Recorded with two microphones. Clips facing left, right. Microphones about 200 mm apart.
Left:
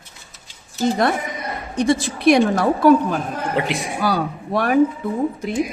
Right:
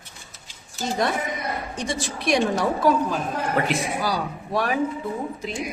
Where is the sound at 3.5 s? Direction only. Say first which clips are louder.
Left 1 dB; 15° left (ahead or behind).